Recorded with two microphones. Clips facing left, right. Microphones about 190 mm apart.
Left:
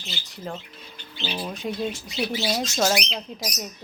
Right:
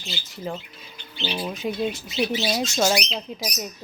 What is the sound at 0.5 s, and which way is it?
Speech, centre (ahead or behind).